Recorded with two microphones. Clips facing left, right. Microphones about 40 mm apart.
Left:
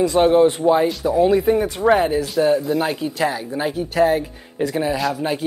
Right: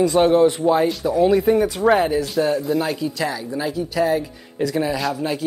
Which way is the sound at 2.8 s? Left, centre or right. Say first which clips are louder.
Left 1 dB; centre.